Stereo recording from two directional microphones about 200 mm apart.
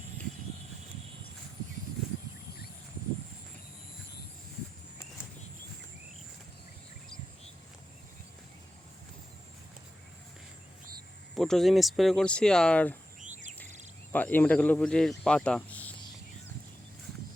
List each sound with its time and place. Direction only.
11.3 s speech: centre (ahead or behind)
13.1 s a sound: 40° right (ahead or behind)
14.1 s speech: 10° left (ahead or behind)